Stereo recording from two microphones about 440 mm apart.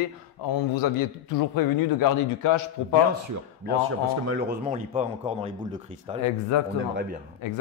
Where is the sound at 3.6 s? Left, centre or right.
Right.